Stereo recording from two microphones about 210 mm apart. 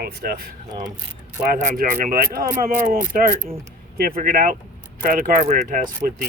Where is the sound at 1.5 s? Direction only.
40° right (ahead or behind).